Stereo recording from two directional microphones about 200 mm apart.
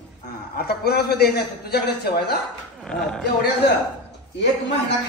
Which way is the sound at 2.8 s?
Centre (ahead or behind).